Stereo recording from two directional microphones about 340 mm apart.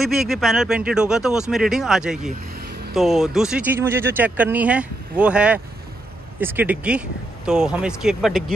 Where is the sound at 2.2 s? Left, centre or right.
Right.